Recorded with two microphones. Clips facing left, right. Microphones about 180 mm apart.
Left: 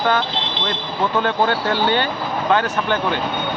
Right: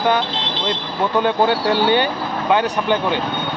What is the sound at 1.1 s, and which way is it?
Speech, 15° right (ahead or behind).